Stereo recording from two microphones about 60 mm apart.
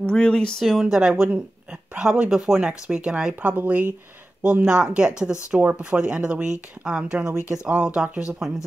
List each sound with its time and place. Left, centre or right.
0.0 s speech: centre
0.7 s speech: centre
3.5 s speech: right
4.6 s speech: centre